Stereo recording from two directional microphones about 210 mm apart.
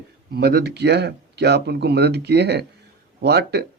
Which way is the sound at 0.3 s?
50° right (ahead or behind).